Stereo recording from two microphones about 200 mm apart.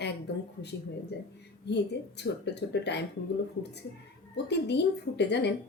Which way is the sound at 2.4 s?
60° left (ahead or behind).